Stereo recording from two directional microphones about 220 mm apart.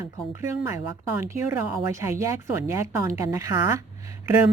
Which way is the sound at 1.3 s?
15° right (ahead or behind).